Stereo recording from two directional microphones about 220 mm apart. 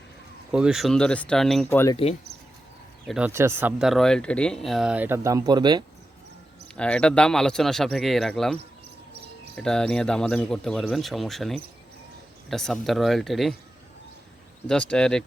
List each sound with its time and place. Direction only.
0.5 s speech: 5° right (ahead or behind)
1.8 s speech: 20° left (ahead or behind)
3.1 s speech: 5° right (ahead or behind)
6.7 s speech: 5° left (ahead or behind)
9.6 s speech: 5° left (ahead or behind)
14.7 s speech: 5° left (ahead or behind)